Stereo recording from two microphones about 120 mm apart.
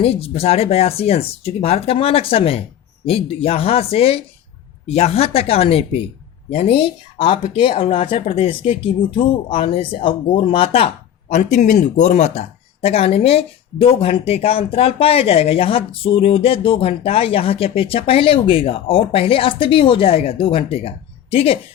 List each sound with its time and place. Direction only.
0.0 s speech: 55° left (ahead or behind)